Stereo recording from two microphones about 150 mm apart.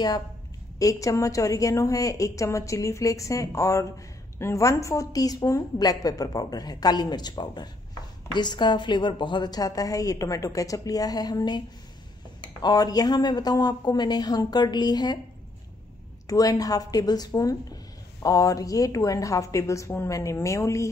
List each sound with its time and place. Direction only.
0.7 s a woman's voice: 20° left (ahead or behind)
12.6 s a woman's voice: 25° left (ahead or behind)
16.3 s a woman's voice: 25° left (ahead or behind)